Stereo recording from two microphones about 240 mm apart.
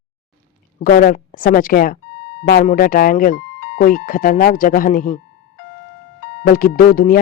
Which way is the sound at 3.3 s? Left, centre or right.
Left.